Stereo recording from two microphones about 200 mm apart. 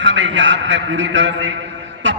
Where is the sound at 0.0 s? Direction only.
65° right (ahead or behind).